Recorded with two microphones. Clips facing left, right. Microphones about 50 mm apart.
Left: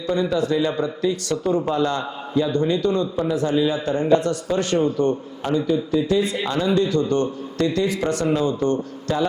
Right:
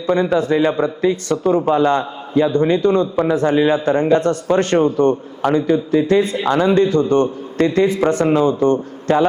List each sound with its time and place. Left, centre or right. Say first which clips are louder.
0.1 s a man's voice: right 5 dB; right